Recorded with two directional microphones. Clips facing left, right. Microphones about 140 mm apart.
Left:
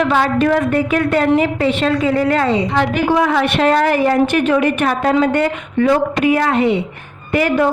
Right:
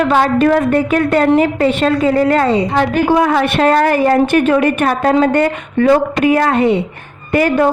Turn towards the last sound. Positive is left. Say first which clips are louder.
# right 2 dB
turn(degrees=-45)  # may be behind; listen again after turning